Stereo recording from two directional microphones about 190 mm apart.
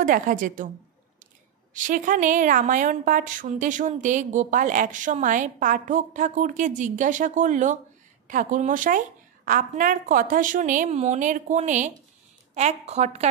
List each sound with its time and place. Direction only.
0.0 s a woman's voice: 45° right (ahead or behind)
1.7 s a woman's voice: 45° right (ahead or behind)